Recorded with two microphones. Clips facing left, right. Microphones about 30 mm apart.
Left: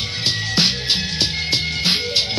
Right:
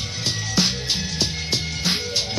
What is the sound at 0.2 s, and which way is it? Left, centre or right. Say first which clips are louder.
Music: left 4 dB; left.